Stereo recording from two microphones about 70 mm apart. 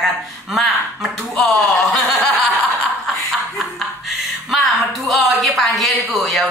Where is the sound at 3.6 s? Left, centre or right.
Centre.